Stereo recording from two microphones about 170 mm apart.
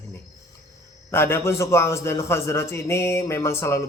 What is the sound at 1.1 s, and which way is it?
A man's voice, 15° left (ahead or behind).